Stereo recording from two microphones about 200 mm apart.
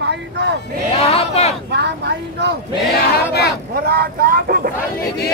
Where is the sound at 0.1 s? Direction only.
60° right (ahead or behind).